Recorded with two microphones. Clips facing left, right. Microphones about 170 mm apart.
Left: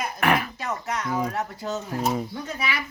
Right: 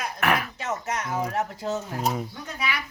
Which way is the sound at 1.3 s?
15° right (ahead or behind).